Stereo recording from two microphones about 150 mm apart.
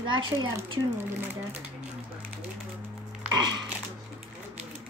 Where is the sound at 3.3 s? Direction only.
30° right (ahead or behind).